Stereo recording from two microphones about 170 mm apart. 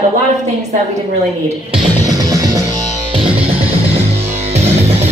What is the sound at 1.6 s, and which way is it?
Music, 25° right (ahead or behind).